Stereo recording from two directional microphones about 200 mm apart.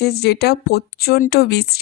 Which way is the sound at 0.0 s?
55° left (ahead or behind).